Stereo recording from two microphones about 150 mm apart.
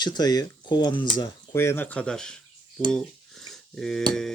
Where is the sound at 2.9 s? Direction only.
Centre (ahead or behind).